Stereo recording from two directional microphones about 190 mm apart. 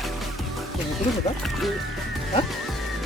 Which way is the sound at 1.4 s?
Centre (ahead or behind).